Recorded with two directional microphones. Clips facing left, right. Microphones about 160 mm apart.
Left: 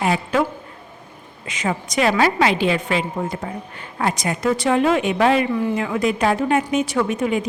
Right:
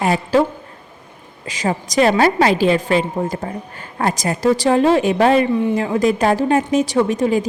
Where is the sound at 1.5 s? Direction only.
35° right (ahead or behind).